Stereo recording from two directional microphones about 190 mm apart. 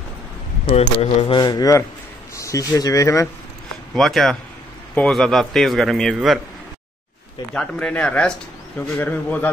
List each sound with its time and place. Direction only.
0.7 s speech: 35° left (ahead or behind)
1.4 s speech: 20° left (ahead or behind)
3.9 s a man's voice: centre (ahead or behind)
7.5 s speech: 5° left (ahead or behind)